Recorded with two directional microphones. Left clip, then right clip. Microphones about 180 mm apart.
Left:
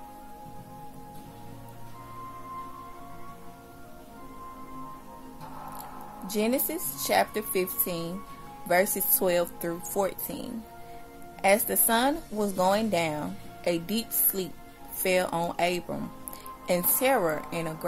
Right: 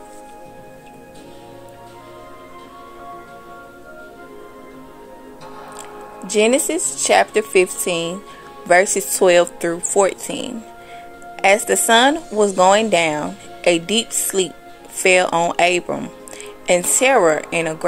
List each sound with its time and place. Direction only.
6.2 s a woman's voice: 15° right (ahead or behind)